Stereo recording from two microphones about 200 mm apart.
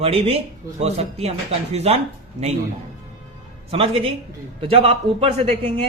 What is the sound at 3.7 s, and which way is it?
Speech, 30° right (ahead or behind).